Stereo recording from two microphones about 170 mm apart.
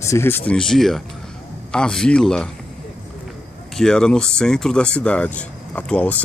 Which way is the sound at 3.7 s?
5° left (ahead or behind).